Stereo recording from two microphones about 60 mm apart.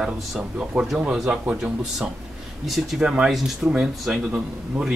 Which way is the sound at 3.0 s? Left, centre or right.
Centre.